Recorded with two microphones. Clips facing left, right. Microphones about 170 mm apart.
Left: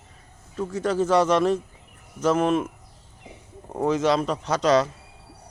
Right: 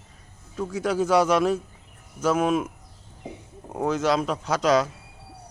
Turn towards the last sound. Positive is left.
turn(degrees=-10)  # may be behind; listen again after turning